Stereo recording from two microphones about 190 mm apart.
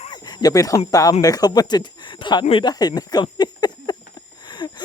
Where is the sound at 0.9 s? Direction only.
20° left (ahead or behind).